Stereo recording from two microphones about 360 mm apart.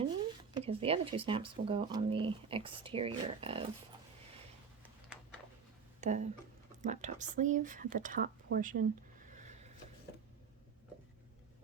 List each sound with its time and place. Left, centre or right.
0.5 s speech: centre
6.0 s speech: centre
9.3 s a sound: centre